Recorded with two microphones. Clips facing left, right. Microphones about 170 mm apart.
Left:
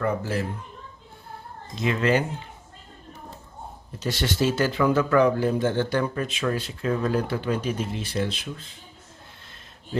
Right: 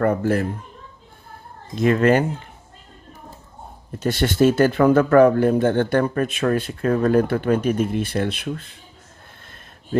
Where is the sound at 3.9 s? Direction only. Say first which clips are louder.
Right 7 dB; 55° right (ahead or behind).